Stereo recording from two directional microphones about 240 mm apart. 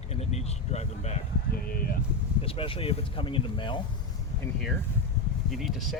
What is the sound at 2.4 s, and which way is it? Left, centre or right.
Speech, left.